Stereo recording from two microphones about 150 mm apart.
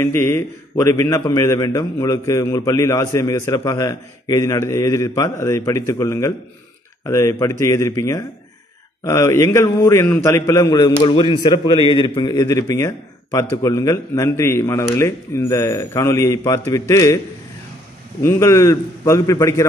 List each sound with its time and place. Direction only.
0.0 s a man's voice: 15° left (ahead or behind)
18.2 s a man's voice: 20° left (ahead or behind)